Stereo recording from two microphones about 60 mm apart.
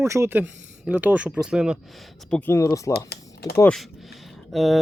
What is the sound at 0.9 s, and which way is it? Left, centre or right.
Speech, right.